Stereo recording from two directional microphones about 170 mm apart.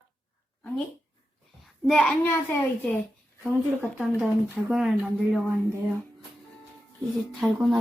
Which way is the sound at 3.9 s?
5° right (ahead or behind).